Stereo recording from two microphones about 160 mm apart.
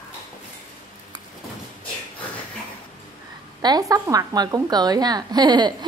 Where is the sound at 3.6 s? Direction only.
25° right (ahead or behind).